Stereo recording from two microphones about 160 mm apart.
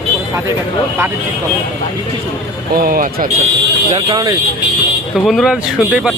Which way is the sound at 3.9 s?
25° right (ahead or behind).